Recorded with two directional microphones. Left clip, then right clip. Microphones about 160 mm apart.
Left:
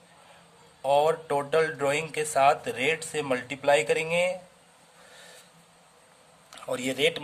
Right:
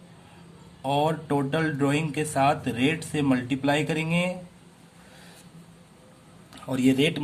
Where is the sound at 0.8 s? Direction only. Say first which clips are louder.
Left 2 dB; 25° left (ahead or behind).